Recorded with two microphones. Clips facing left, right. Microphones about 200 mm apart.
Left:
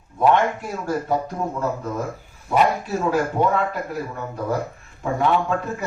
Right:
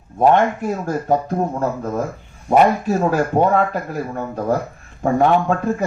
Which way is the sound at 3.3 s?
45° right (ahead or behind).